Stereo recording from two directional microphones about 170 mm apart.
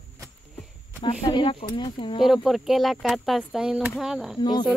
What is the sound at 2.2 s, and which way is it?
Speech, centre (ahead or behind).